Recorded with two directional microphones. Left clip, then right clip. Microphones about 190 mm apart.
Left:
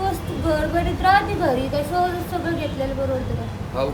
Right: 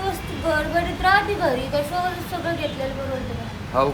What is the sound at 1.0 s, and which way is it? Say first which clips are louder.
Speech: left 1 dB; 10° left (ahead or behind).